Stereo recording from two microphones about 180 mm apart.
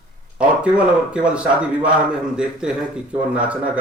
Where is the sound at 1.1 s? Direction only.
5° right (ahead or behind).